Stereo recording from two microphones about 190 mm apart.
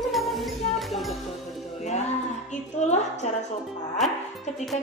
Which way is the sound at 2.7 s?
35° left (ahead or behind).